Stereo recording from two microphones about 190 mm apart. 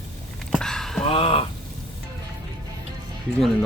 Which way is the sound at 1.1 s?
30° left (ahead or behind).